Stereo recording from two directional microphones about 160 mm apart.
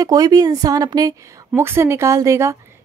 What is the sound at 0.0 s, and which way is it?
A woman's voice, 25° right (ahead or behind).